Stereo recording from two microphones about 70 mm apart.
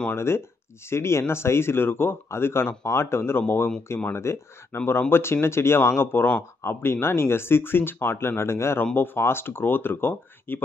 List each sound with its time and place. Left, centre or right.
0.1 s speech: left